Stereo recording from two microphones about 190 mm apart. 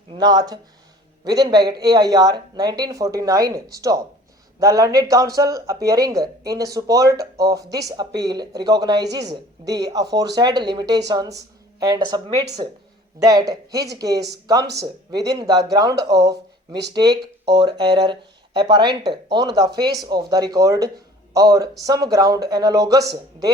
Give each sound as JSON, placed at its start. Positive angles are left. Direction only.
{"t": 0.1, "sound": "speech", "side_deg": -20}
{"t": 16.2, "sound": "speech", "side_deg": -60}
{"t": 16.9, "sound": "speech", "side_deg": -20}